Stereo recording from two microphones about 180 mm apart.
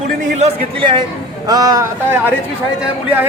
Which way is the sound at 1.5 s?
20° right (ahead or behind).